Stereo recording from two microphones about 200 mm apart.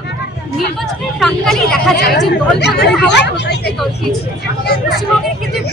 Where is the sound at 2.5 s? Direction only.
55° left (ahead or behind).